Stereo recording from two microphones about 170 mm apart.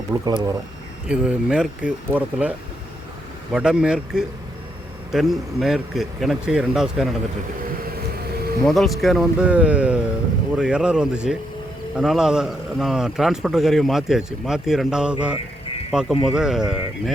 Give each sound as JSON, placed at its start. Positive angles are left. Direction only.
{"t": 0.1, "sound": "speech", "side_deg": -20}
{"t": 1.0, "sound": "a man's voice", "side_deg": -5}
{"t": 7.9, "sound": "vehicle", "side_deg": -65}
{"t": 8.6, "sound": "a man's voice", "side_deg": 0}